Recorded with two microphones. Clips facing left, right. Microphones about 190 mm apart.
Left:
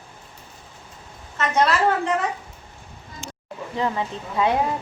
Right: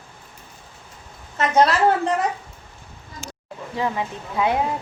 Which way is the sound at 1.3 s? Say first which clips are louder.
Right 3 dB; 35° right (ahead or behind).